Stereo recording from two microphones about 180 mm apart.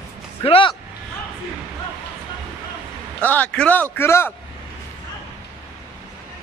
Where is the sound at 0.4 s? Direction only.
30° left (ahead or behind).